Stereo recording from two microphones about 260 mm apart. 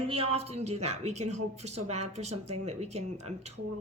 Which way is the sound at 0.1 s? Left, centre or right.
Right.